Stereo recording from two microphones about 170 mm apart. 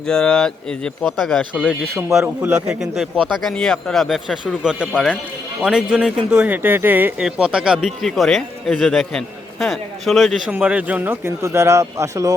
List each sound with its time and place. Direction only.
0.1 s speech: 5° left (ahead or behind); by 12.3 s 20° right (ahead or behind)